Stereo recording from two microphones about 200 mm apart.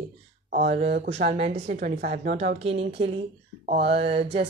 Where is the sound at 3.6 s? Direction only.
35° right (ahead or behind).